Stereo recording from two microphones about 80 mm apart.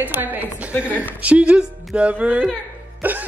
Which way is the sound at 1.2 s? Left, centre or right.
Centre.